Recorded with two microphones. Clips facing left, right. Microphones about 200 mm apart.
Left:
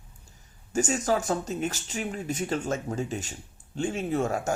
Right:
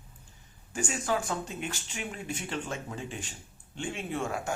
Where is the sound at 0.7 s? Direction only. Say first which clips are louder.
Left 5 dB; 40° left (ahead or behind).